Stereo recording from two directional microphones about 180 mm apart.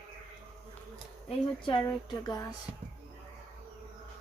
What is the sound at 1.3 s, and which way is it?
Speech, 25° left (ahead or behind).